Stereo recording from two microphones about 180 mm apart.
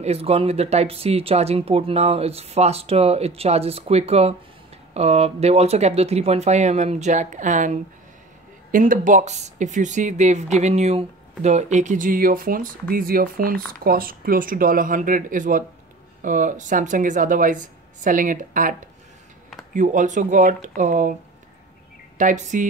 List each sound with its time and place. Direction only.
0.0 s speech: 35° right (ahead or behind)
22.2 s speech: 45° right (ahead or behind)